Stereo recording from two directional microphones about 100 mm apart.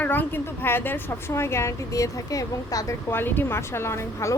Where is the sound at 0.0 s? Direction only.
20° left (ahead or behind); by 2.9 s 35° left (ahead or behind).